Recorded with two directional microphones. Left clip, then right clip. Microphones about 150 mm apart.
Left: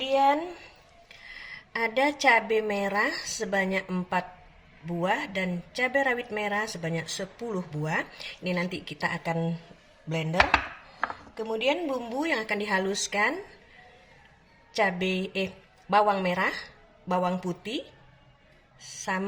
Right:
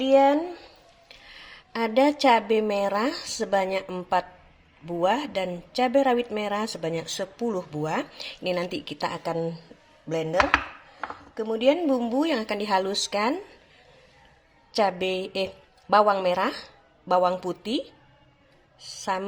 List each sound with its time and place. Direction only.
0.0 s a woman's voice: 35° right (ahead or behind)
1.0 s speech: 45° right (ahead or behind)
11.3 s a woman's voice: 40° right (ahead or behind)
14.8 s speech: 45° right (ahead or behind)